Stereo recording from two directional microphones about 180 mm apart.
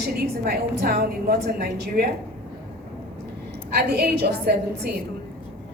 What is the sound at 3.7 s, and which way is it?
A woman's voice, 65° right (ahead or behind).